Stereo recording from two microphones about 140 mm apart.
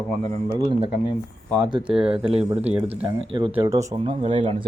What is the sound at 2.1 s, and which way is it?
Speech, 40° right (ahead or behind).